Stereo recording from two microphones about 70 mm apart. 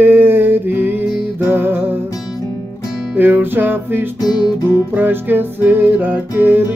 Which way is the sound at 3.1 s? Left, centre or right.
Right.